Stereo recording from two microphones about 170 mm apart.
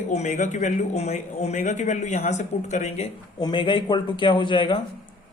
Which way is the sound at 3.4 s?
25° left (ahead or behind).